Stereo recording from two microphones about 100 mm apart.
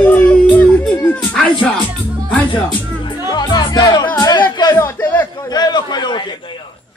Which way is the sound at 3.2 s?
45° left (ahead or behind).